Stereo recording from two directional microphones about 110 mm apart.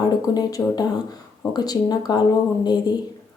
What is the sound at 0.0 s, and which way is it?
Speech, 35° left (ahead or behind).